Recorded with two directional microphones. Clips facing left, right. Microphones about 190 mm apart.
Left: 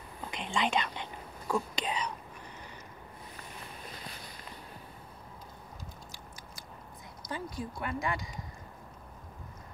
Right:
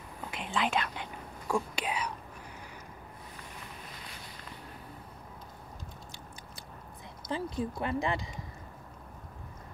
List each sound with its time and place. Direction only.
0.3 s speech: 5° right (ahead or behind)
7.2 s speech: 30° right (ahead or behind)